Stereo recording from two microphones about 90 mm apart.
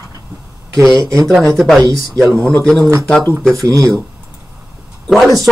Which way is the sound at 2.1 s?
10° left (ahead or behind).